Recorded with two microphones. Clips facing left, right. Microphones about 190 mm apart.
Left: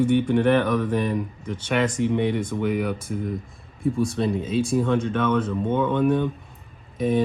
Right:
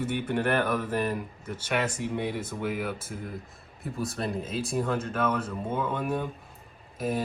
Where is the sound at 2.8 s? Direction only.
5° right (ahead or behind).